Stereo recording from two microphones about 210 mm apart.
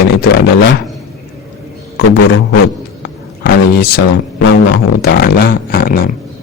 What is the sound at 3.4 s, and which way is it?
Speech, 45° left (ahead or behind).